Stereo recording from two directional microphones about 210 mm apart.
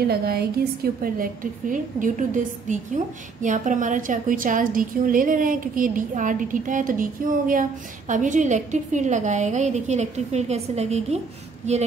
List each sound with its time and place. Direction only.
0.1 s a woman's voice: 50° right (ahead or behind)